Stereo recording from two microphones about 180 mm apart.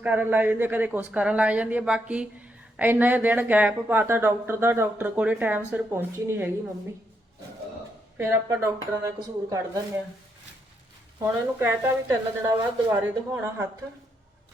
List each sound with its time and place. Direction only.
0.0 s speech: 10° right (ahead or behind)
8.2 s speech: 15° right (ahead or behind)
11.2 s speech: 15° right (ahead or behind)